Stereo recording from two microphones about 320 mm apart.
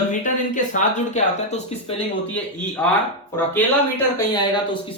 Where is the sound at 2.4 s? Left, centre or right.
Centre.